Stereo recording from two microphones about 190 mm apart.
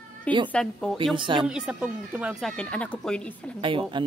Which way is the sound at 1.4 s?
5° right (ahead or behind).